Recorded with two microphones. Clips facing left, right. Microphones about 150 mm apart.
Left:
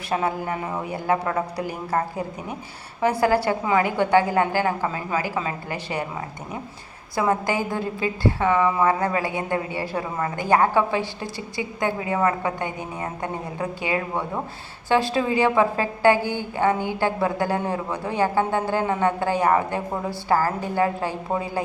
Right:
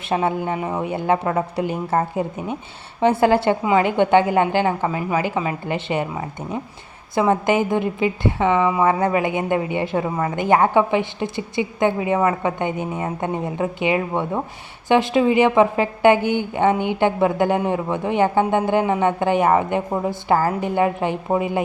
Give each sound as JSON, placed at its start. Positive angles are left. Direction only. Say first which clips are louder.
{"t": 0.1, "sound": "a woman's voice", "louder": "right 4 dB", "side_deg": -25}
{"t": 7.2, "sound": "a woman's voice", "louder": "right 5 dB", "side_deg": -20}